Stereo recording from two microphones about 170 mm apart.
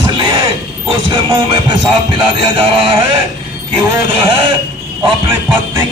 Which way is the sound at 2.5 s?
30° right (ahead or behind).